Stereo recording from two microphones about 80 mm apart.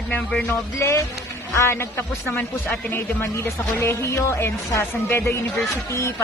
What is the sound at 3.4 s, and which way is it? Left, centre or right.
Speech, left.